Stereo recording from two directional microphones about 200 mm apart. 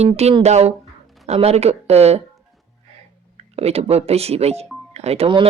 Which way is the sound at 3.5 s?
30° right (ahead or behind).